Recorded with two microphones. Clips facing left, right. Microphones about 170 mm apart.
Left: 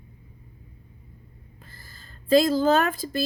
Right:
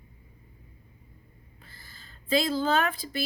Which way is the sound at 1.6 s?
45° left (ahead or behind).